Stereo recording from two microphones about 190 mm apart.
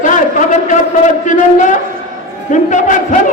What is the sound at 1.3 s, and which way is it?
A man's voice, 40° left (ahead or behind).